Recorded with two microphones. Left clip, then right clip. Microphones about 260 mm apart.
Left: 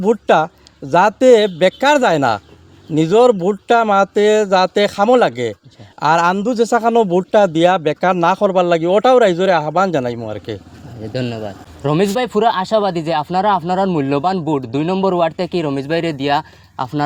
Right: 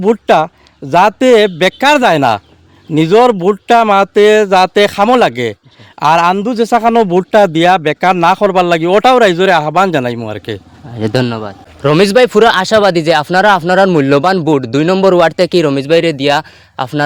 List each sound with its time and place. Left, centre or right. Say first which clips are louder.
0.0 s a man's voice: right 4 dB; right